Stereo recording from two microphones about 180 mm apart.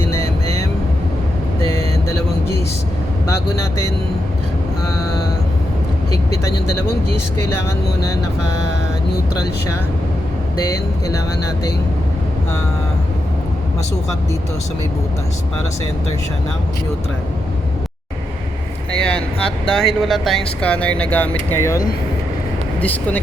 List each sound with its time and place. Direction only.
18.9 s speech: 5° left (ahead or behind)